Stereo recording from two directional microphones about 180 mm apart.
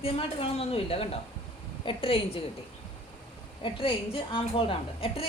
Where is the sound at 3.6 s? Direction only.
30° left (ahead or behind).